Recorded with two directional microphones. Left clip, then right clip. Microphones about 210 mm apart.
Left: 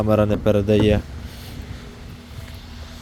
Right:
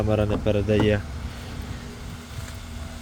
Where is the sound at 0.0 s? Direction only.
30° left (ahead or behind).